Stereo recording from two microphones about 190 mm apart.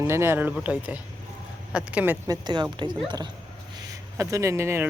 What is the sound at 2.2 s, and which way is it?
Speech, 20° right (ahead or behind).